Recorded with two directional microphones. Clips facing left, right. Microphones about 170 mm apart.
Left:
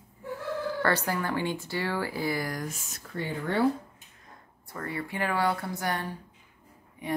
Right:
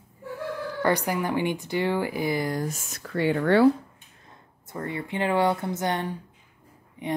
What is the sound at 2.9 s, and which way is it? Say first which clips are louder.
Speech: right 11 dB; 80° right.